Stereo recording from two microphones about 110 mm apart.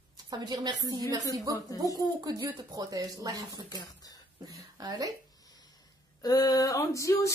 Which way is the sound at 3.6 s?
35° left (ahead or behind).